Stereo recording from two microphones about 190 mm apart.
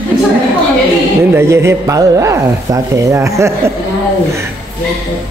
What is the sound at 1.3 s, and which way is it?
Speech, 15° right (ahead or behind).